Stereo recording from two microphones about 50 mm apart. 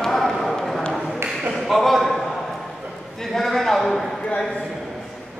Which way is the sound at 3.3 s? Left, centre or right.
Centre.